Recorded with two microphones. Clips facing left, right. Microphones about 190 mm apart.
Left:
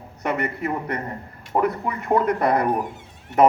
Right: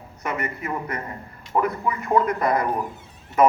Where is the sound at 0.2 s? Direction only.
65° left (ahead or behind).